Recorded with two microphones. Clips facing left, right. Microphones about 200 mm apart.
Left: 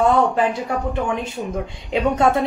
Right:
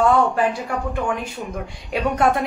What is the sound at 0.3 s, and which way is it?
Speech, 20° left (ahead or behind).